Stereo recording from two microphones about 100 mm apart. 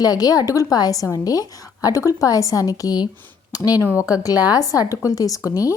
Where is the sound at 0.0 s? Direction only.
40° left (ahead or behind).